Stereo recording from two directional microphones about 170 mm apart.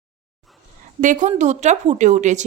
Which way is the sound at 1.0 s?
50° right (ahead or behind).